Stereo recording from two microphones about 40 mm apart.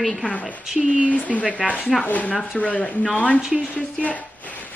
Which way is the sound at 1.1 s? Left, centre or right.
Left.